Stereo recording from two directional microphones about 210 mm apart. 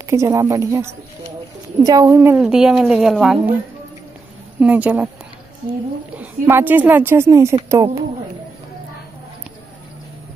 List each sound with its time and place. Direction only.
0.0 s a woman's voice: 15° right (ahead or behind)
4.6 s a woman's voice: 5° right (ahead or behind)
6.1 s a woman's voice: 10° right (ahead or behind)